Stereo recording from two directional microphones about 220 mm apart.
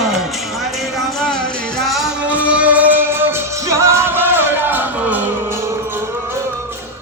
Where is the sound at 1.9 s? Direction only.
5° right (ahead or behind).